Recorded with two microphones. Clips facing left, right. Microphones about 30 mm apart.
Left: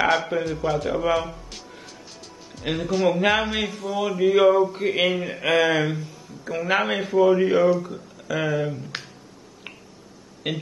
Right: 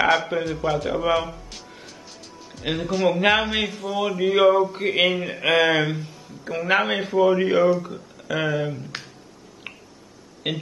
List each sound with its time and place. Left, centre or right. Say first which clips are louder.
0.0 s a man's voice: right 1 dB; centre
6.6 s a man's voice: right 2 dB; centre
10.4 s a man's voice: right 1 dB; centre